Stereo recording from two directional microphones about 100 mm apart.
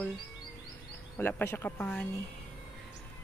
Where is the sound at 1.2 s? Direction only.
20° left (ahead or behind).